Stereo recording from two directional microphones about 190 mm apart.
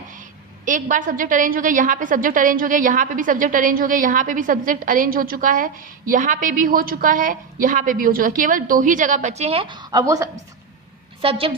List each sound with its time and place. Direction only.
0.6 s a woman's voice: 45° right (ahead or behind); by 10.2 s 20° right (ahead or behind)
11.2 s a woman's voice: 30° right (ahead or behind)